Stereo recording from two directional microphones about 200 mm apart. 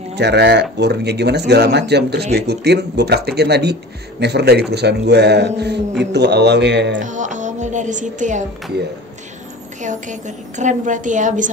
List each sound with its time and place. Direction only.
0.1 s speech: 60° right (ahead or behind)
7.0 s speech: 40° right (ahead or behind)
9.8 s a woman's voice: 40° right (ahead or behind)